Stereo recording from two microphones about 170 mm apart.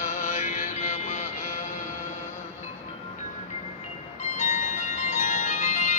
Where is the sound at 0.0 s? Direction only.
45° left (ahead or behind).